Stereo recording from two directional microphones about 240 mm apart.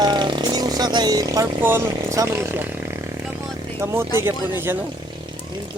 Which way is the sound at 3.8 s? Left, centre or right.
Centre.